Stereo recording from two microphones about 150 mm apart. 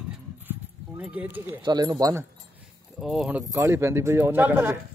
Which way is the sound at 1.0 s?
10° right (ahead or behind).